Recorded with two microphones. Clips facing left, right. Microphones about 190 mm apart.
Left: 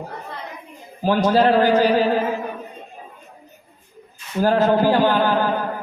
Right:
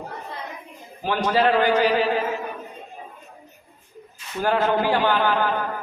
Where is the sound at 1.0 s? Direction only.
40° left (ahead or behind).